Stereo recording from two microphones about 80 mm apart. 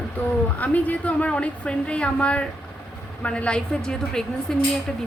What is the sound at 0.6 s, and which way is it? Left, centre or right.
A woman's voice, centre.